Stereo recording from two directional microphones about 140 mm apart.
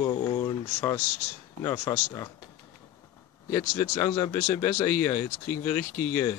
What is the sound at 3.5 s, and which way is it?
Speech, 20° left (ahead or behind).